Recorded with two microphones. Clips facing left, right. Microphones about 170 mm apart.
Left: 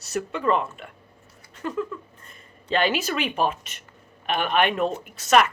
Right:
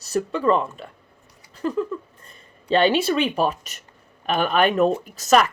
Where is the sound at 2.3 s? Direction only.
30° right (ahead or behind).